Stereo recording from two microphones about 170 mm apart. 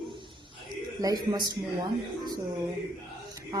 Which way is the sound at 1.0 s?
20° right (ahead or behind).